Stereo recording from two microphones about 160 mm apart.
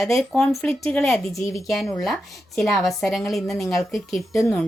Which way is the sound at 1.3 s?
20° left (ahead or behind).